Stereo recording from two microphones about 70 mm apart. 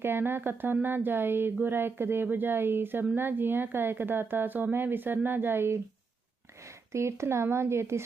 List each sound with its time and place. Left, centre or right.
0.0 s speech: right
6.9 s speech: right